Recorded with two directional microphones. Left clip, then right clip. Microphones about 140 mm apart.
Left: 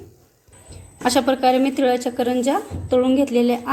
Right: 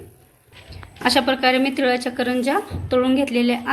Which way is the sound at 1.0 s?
25° left (ahead or behind).